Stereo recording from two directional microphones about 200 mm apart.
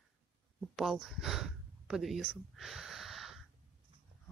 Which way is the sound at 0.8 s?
Centre (ahead or behind).